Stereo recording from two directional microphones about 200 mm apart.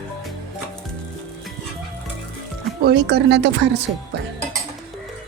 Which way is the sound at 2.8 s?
55° right (ahead or behind).